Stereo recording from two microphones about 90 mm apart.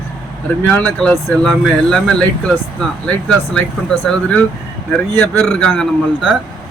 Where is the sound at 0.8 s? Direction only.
15° left (ahead or behind).